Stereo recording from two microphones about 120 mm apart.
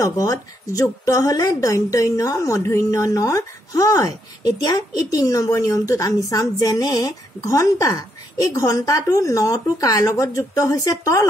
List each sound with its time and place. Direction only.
0.0 s a woman's voice: 30° left (ahead or behind)